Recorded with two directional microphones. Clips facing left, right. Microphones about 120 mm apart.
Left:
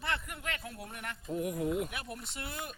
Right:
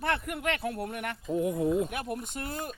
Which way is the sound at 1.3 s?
25° right (ahead or behind).